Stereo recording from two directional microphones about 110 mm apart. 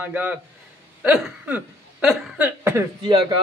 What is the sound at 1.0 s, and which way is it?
Hiccup, 5° right (ahead or behind).